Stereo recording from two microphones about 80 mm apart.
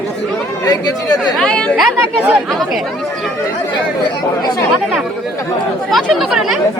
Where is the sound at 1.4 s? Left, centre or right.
Centre.